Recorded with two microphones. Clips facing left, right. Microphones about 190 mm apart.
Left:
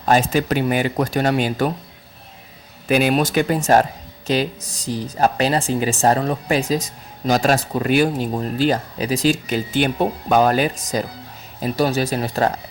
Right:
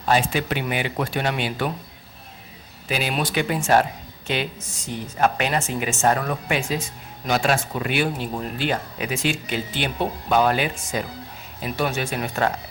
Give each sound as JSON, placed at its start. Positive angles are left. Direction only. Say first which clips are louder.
{"t": 0.0, "sound": "speech", "louder": "left 4 dB", "side_deg": 45}
{"t": 2.8, "sound": "speech", "louder": "left 8 dB", "side_deg": 50}